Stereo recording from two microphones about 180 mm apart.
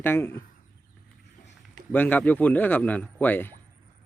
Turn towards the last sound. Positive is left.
turn(degrees=10)  # may be behind; listen again after turning